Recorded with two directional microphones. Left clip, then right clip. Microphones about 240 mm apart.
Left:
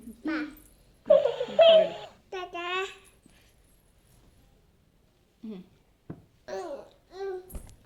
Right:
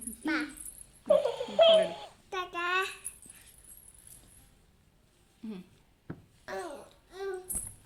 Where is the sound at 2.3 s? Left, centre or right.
Centre.